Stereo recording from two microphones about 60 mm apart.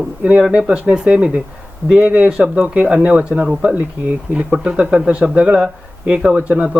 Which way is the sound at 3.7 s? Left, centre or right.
Right.